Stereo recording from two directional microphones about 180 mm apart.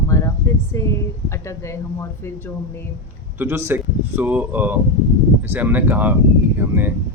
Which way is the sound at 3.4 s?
15° right (ahead or behind).